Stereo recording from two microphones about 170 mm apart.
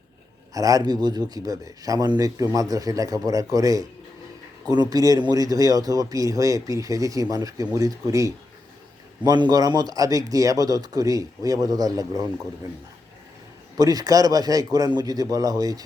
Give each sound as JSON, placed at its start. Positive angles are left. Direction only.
{"t": 0.5, "sound": "a man's voice", "side_deg": -20}
{"t": 13.7, "sound": "a man's voice", "side_deg": -20}